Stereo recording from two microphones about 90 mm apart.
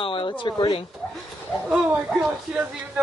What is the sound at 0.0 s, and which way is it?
Speech, 70° left (ahead or behind).